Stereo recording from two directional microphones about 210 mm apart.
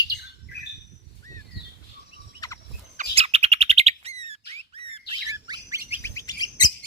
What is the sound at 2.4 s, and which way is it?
Fowl, 15° left (ahead or behind).